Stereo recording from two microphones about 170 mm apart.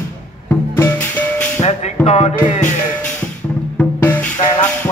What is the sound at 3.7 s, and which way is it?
Music, 10° left (ahead or behind).